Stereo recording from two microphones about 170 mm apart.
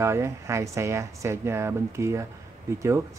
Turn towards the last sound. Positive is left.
turn(degrees=-15)  # may be behind; listen again after turning